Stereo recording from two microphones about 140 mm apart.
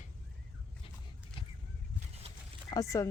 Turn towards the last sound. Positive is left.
turn(degrees=25)  # may be behind; listen again after turning